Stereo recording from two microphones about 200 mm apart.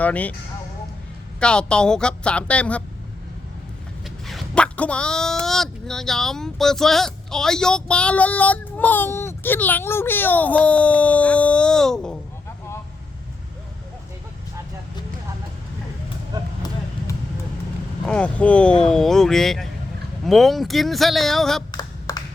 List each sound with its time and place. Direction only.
0.0 s speech: 5° left (ahead or behind)
1.4 s speech: 5° left (ahead or behind)
4.0 s speech: centre (ahead or behind)
18.0 s speech: 5° left (ahead or behind)
21.7 s a sound: 20° left (ahead or behind)